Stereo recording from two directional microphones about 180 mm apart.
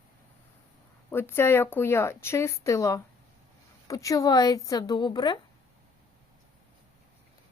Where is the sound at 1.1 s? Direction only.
15° left (ahead or behind).